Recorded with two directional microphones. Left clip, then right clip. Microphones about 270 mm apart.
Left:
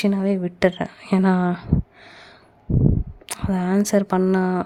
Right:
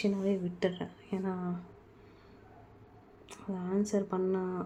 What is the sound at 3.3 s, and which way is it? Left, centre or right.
Speech, left.